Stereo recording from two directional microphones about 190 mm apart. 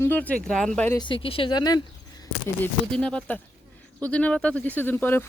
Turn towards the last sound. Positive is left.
turn(degrees=10)  # may be behind; listen again after turning